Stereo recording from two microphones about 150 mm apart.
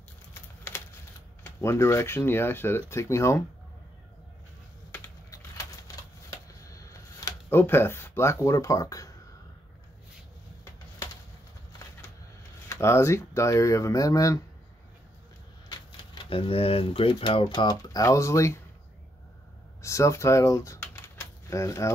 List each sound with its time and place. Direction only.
0.3 s typing: 15° left (ahead or behind)
1.4 s speech: 20° left (ahead or behind)
4.9 s typing: 25° left (ahead or behind)
6.3 s a sound: 20° left (ahead or behind)
12.6 s speech: 15° left (ahead or behind)
15.7 s speech: 35° left (ahead or behind)
19.8 s speech: 20° left (ahead or behind)